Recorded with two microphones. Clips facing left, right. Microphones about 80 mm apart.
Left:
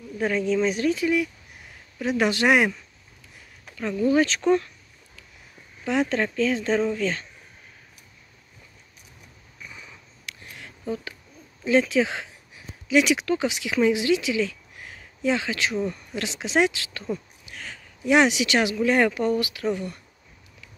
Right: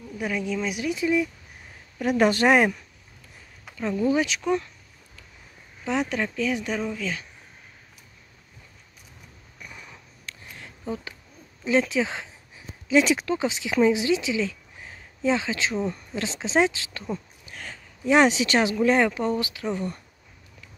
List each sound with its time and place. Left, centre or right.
0.3 s speech: centre
0.9 s speech: right
2.0 s speech: right
4.0 s speech: right
4.3 s speech: centre
5.9 s speech: centre
10.2 s a sound: right
11.9 s speech: right
12.8 s speech: right
17.5 s speech: right
18.9 s speech: centre